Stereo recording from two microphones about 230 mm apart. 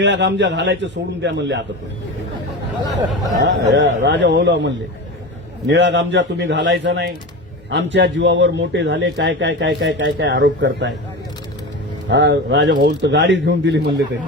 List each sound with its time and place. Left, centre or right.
0.0 s a man's voice: right
3.4 s a man's voice: right
12.0 s a man's voice: right